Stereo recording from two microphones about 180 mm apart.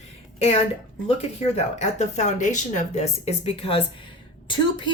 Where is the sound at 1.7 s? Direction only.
40° left (ahead or behind).